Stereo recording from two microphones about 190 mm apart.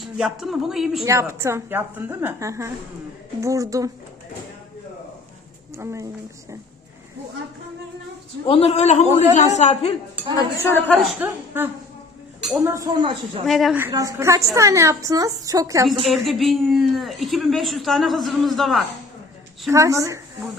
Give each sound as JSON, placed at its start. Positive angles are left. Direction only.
{"t": 0.0, "sound": "speech", "side_deg": 0}
{"t": 1.0, "sound": "a woman's voice", "side_deg": -15}
{"t": 5.7, "sound": "a woman's voice", "side_deg": -15}
{"t": 8.4, "sound": "speech", "side_deg": 30}
{"t": 10.6, "sound": "a man's voice", "side_deg": 10}
{"t": 10.9, "sound": "a woman's voice", "side_deg": -10}
{"t": 13.4, "sound": "speech", "side_deg": 0}
{"t": 13.7, "sound": "a woman's voice", "side_deg": -15}
{"t": 16.0, "sound": "speech", "side_deg": 0}
{"t": 19.7, "sound": "a woman's voice", "side_deg": -15}